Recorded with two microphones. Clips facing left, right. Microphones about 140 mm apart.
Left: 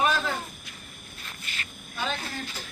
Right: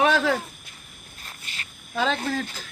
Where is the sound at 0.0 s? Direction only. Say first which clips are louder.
Right 5 dB; 90° right.